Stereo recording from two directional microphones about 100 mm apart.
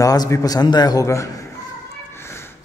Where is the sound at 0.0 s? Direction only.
35° left (ahead or behind).